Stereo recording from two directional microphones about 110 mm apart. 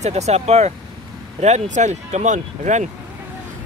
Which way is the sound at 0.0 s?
85° right.